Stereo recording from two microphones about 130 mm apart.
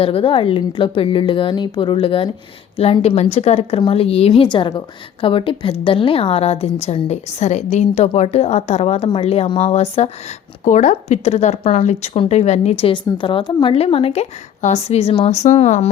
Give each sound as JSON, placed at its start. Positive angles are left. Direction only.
{"t": 0.0, "sound": "a woman's voice", "side_deg": 45}
{"t": 3.2, "sound": "a woman's voice", "side_deg": 55}
{"t": 4.4, "sound": "a woman's voice", "side_deg": 40}